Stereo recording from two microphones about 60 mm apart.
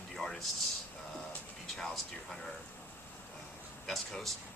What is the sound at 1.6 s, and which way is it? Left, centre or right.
Speech, centre.